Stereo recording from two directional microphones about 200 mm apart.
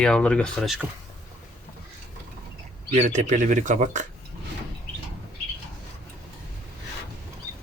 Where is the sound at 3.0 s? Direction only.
35° right (ahead or behind).